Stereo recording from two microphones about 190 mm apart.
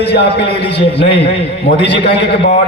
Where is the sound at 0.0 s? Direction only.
60° left (ahead or behind).